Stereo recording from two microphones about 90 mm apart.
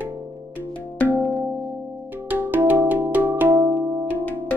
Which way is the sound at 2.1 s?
20° right (ahead or behind).